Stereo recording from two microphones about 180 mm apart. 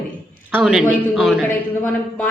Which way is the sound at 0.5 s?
5° right (ahead or behind).